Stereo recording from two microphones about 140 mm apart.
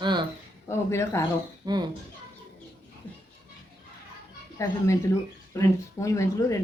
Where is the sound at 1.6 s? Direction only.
30° right (ahead or behind).